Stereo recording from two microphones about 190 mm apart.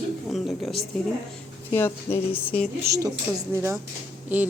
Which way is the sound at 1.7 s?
10° left (ahead or behind).